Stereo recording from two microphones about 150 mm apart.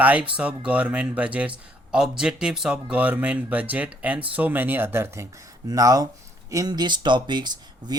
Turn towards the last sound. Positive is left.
turn(degrees=-30)  # may be behind; listen again after turning